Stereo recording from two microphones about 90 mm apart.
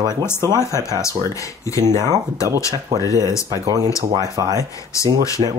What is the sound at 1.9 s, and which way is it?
Speech, 40° right (ahead or behind).